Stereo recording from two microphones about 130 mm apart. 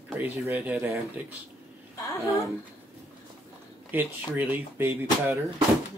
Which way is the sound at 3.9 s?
15° right (ahead or behind).